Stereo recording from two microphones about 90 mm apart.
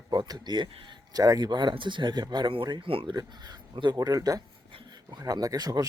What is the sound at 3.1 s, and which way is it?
Speech, 45° right (ahead or behind).